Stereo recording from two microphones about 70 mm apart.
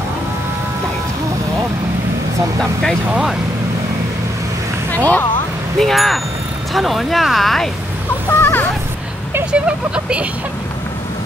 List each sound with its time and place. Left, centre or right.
4.9 s speech: left
5.8 s speech: centre
8.3 s a sound: left
9.5 s speech: centre